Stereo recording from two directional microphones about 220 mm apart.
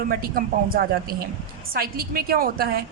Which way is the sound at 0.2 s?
40° right (ahead or behind).